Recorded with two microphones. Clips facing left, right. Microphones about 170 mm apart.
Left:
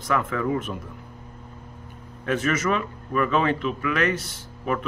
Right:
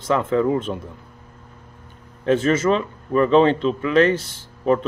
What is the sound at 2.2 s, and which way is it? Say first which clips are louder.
Speech: right 6 dB; 30° right (ahead or behind).